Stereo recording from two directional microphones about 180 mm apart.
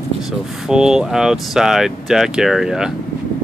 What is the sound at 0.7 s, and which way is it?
Speech, 5° right (ahead or behind).